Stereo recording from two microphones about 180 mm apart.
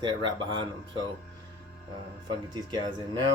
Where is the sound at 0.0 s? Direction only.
25° right (ahead or behind).